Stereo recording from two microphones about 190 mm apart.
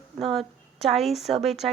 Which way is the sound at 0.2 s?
Centre (ahead or behind).